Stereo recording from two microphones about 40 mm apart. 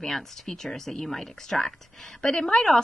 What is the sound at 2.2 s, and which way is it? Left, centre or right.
Speech, left.